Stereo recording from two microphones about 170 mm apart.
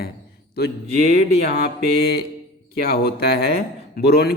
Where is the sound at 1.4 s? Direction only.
70° left (ahead or behind).